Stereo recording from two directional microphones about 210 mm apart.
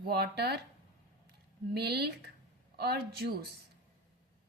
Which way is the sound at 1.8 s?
50° right (ahead or behind).